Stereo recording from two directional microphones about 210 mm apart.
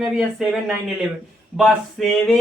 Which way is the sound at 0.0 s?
Centre (ahead or behind).